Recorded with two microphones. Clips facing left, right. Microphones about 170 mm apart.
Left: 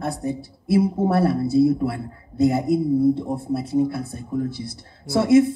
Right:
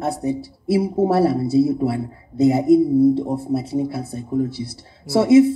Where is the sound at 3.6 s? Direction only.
55° left (ahead or behind).